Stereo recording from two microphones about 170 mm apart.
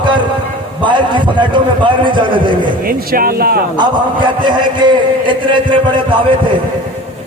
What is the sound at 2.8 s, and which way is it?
Speech, 60° right (ahead or behind).